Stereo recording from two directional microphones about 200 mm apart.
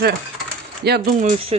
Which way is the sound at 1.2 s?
30° right (ahead or behind).